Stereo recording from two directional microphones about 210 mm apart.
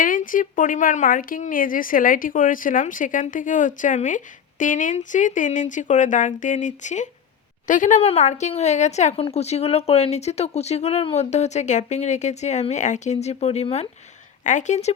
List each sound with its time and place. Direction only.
0.0 s speech: 40° left (ahead or behind)